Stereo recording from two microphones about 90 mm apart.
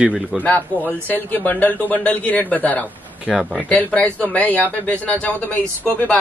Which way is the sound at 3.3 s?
Centre (ahead or behind).